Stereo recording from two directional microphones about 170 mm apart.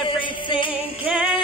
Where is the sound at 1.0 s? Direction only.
5° right (ahead or behind).